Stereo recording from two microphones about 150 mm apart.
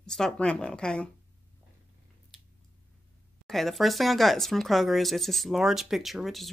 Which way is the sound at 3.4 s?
Centre (ahead or behind).